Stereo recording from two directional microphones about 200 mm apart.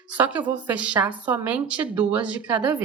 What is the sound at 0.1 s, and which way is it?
A woman's voice, 5° right (ahead or behind).